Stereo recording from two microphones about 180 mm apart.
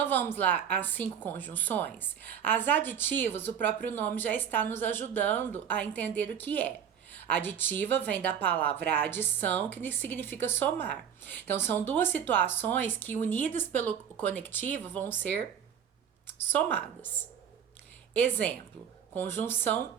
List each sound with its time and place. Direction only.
0.0 s a woman's voice: 10° left (ahead or behind)
10.8 s speech: 70° right (ahead or behind)
11.4 s a woman's voice: 10° left (ahead or behind)
18.3 s a woman's voice: 10° left (ahead or behind)